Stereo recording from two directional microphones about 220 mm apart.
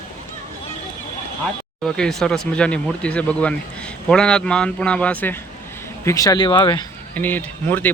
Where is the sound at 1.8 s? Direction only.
5° left (ahead or behind); by 6.9 s 20° left (ahead or behind).